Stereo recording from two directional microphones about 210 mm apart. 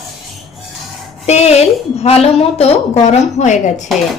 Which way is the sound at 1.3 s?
30° left (ahead or behind).